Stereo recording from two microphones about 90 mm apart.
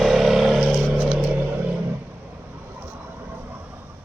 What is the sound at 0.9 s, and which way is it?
Vehicle, 20° right (ahead or behind).